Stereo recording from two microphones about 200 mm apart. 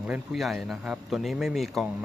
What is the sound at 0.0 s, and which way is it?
Speech, 5° right (ahead or behind).